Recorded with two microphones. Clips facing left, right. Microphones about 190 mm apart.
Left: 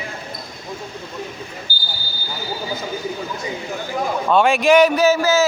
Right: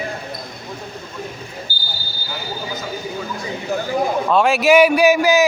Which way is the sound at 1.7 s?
45° left (ahead or behind).